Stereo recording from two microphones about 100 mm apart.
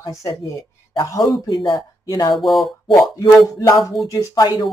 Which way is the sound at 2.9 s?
40° left (ahead or behind).